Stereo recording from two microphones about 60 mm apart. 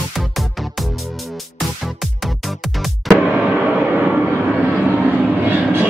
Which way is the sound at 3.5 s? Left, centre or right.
Right.